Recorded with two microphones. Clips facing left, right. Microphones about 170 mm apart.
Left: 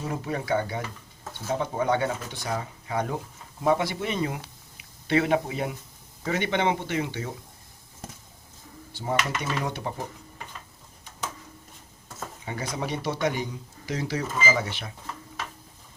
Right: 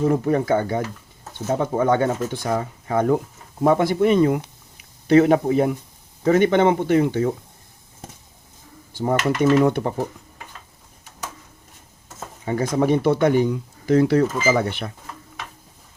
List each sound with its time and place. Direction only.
0.0 s speech: 50° right (ahead or behind)
8.9 s speech: 45° right (ahead or behind)
12.5 s speech: 50° right (ahead or behind)